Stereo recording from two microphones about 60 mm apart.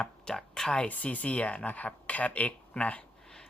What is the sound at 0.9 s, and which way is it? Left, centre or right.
Speech, left.